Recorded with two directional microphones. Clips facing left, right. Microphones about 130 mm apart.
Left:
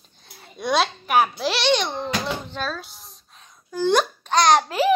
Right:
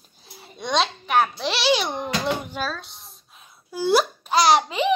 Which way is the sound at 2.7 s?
Centre (ahead or behind).